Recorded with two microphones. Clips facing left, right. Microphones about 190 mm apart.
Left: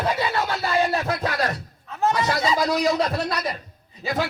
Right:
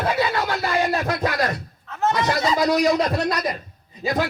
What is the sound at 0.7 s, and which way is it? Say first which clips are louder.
Speech: left 1 dB; 15° right (ahead or behind).